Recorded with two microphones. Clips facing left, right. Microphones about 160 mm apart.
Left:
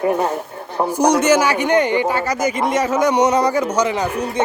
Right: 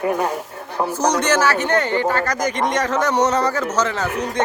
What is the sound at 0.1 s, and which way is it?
Speech, 10° left (ahead or behind).